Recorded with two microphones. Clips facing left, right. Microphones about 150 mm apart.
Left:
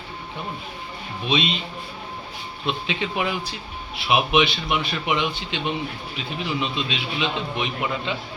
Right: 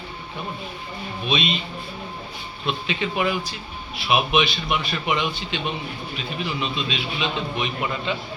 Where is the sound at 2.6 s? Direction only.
20° left (ahead or behind).